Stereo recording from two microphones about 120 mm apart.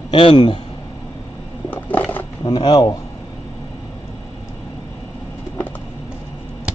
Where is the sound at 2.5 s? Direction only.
35° left (ahead or behind).